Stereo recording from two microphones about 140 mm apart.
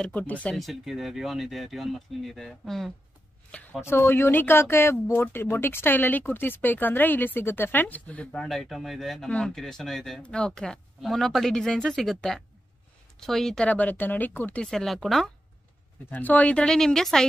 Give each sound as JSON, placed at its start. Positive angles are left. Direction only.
{"t": 0.0, "sound": "speech", "side_deg": 10}
{"t": 3.8, "sound": "speech", "side_deg": 15}
{"t": 16.1, "sound": "speech", "side_deg": 10}